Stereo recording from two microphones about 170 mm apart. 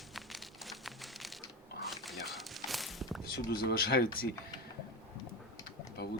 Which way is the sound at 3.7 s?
65° left (ahead or behind).